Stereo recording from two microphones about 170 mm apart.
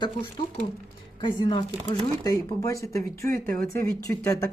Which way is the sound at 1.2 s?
25° left (ahead or behind).